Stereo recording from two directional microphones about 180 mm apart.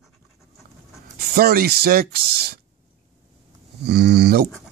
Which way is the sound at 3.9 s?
65° right (ahead or behind).